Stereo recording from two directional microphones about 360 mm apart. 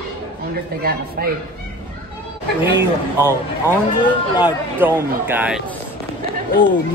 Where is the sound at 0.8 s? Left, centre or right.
Right.